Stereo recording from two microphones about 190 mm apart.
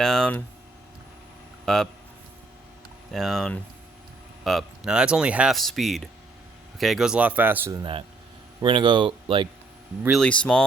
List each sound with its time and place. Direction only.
0.0 s speech: 5° left (ahead or behind)
1.6 s speech: centre (ahead or behind)
3.1 s speech: centre (ahead or behind); by 9.5 s 25° right (ahead or behind)
10.0 s speech: centre (ahead or behind)